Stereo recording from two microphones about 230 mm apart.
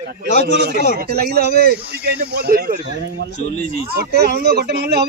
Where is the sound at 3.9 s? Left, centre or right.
Right.